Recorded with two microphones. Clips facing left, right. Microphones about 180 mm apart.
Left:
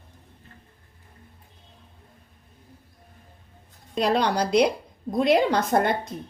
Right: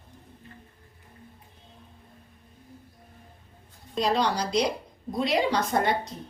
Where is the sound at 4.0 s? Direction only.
60° left (ahead or behind).